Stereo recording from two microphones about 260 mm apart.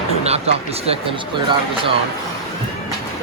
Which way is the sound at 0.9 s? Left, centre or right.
Centre.